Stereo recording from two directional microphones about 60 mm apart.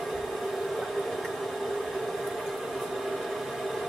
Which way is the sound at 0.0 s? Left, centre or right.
Centre.